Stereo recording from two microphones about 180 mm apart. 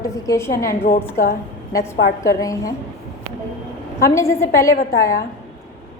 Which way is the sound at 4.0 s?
15° left (ahead or behind).